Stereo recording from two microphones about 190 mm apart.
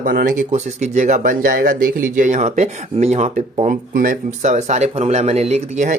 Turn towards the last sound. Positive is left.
turn(degrees=-35)  # may be behind; listen again after turning